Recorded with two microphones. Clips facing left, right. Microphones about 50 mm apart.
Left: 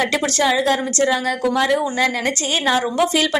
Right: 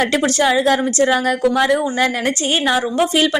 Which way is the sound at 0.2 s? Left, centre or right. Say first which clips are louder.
Right 3 dB; centre.